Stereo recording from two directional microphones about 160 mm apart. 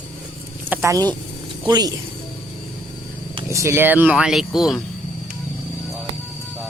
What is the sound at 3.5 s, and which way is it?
Speech, 15° right (ahead or behind).